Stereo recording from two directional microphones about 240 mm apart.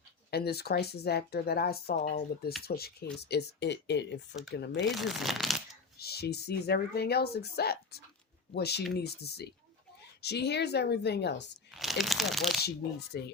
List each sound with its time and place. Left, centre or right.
0.3 s a woman's voice: left
4.9 s speech: centre
6.0 s a woman's voice: left
11.7 s speech: centre
13.1 s a woman's voice: left